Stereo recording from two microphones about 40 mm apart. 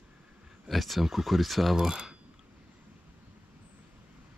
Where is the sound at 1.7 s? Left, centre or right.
Centre.